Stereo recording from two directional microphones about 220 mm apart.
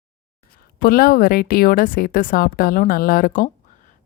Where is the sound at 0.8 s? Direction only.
45° left (ahead or behind).